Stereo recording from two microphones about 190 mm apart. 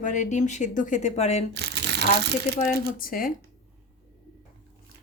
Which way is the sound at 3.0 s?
45° left (ahead or behind).